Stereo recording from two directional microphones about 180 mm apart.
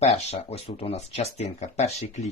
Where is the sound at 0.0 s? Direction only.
35° left (ahead or behind).